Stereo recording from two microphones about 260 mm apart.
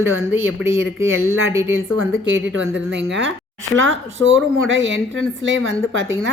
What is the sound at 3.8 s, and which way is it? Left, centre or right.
Speech, right.